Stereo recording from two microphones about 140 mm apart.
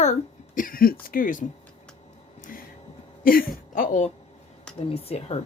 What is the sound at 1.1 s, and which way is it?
Speech, 75° left (ahead or behind).